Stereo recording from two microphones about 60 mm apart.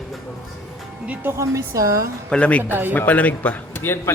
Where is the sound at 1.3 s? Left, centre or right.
Right.